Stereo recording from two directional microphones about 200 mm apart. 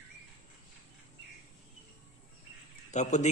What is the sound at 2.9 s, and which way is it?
Speech, 35° left (ahead or behind).